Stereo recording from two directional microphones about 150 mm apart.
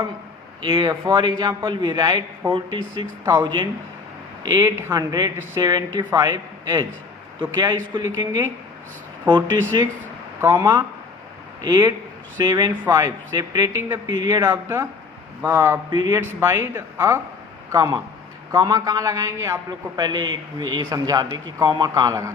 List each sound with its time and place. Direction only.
0.6 s speech: 30° right (ahead or behind); by 15.8 s 15° right (ahead or behind)
15.9 s speech: 30° right (ahead or behind)
16.4 s speech: 15° right (ahead or behind)